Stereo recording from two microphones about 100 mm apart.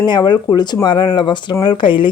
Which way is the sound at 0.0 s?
45° left (ahead or behind).